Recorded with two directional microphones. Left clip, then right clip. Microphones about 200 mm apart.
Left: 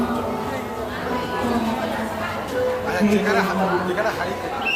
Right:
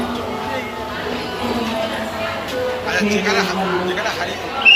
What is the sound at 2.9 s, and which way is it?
Speech, 55° left (ahead or behind).